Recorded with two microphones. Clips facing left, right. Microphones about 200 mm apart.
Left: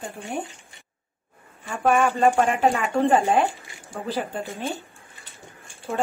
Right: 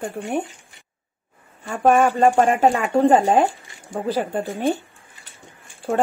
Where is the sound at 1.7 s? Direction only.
50° right (ahead or behind).